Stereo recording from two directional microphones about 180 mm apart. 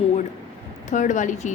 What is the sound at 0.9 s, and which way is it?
Speech, 45° left (ahead or behind).